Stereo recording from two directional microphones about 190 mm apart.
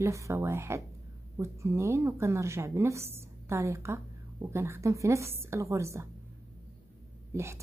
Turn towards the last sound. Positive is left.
turn(degrees=-15)  # may be behind; listen again after turning